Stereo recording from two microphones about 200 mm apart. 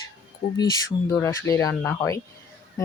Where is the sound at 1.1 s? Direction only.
15° left (ahead or behind).